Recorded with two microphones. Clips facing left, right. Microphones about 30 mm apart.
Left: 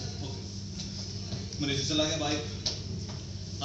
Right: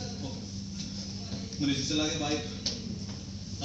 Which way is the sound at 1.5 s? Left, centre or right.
Left.